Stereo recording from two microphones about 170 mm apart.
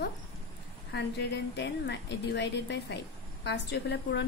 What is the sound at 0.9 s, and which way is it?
A woman's voice, 90° left.